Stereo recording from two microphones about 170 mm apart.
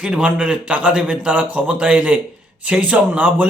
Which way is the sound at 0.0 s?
5° right (ahead or behind).